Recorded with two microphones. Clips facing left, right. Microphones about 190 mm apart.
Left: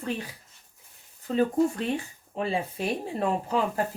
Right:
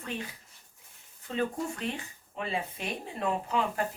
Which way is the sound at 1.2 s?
35° left (ahead or behind).